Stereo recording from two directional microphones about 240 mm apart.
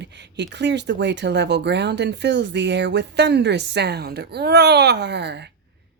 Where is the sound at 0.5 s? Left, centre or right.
Right.